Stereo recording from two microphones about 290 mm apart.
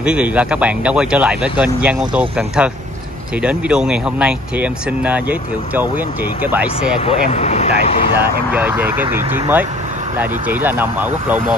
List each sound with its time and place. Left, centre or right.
0.0 s speech: centre
7.1 s speech: left
8.5 s speech: centre